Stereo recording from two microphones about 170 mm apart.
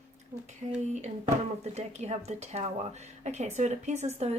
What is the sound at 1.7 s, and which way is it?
Speech, 40° right (ahead or behind).